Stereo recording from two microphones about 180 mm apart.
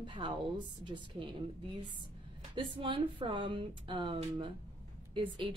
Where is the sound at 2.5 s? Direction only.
30° right (ahead or behind).